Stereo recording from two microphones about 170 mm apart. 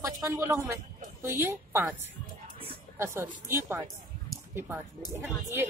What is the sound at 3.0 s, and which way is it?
Speech, 15° right (ahead or behind).